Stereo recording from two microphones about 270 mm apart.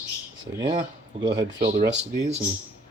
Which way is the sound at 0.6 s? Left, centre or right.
Centre.